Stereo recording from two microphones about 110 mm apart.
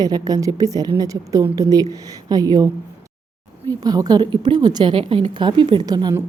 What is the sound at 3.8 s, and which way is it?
A woman's voice, 35° right (ahead or behind).